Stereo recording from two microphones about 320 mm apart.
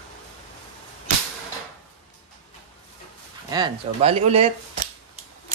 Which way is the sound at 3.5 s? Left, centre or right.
Centre.